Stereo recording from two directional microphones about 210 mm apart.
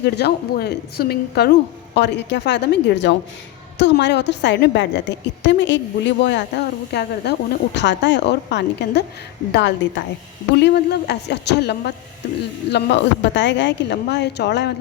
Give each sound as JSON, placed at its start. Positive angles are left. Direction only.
{"t": 0.0, "sound": "a woman's voice", "side_deg": 50}